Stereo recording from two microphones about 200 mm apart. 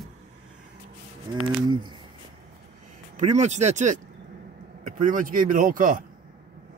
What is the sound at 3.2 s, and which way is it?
Speech, 35° right (ahead or behind).